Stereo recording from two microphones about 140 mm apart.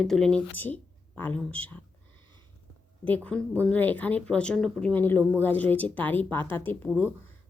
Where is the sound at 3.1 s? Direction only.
10° left (ahead or behind).